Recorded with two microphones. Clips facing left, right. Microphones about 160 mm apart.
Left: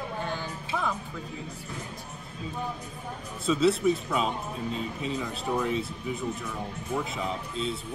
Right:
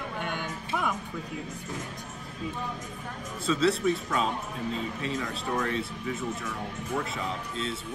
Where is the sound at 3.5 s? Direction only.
Centre (ahead or behind).